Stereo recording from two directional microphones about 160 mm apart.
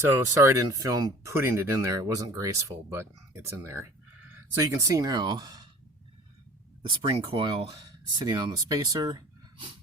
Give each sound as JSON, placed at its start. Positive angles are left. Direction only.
{"t": 0.1, "sound": "speech", "side_deg": -15}
{"t": 6.9, "sound": "speech", "side_deg": -35}